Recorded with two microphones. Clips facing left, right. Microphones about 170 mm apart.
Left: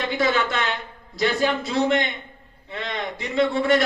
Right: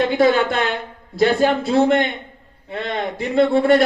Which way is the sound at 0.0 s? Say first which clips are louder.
Right 7 dB; 50° right (ahead or behind).